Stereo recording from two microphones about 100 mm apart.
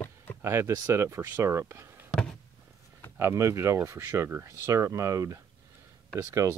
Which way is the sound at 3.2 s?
30° right (ahead or behind).